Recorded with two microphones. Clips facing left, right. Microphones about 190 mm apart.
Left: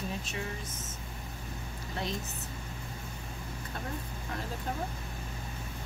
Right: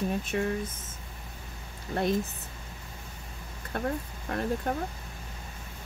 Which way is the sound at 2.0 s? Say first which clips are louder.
Right 9 dB; 55° right (ahead or behind).